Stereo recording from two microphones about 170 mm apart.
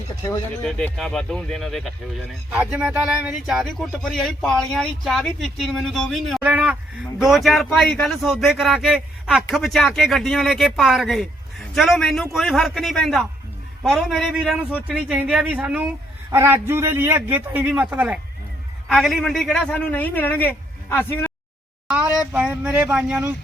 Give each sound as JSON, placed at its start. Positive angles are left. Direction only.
{"t": 0.2, "sound": "speech", "side_deg": 25}
{"t": 0.4, "sound": "speech", "side_deg": 5}
{"t": 6.4, "sound": "a man's voice", "side_deg": -10}
{"t": 21.8, "sound": "a man's voice", "side_deg": -10}